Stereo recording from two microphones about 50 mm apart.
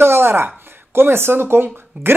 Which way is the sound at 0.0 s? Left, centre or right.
Right.